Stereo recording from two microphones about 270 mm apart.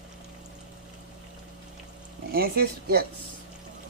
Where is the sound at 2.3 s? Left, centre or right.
Right.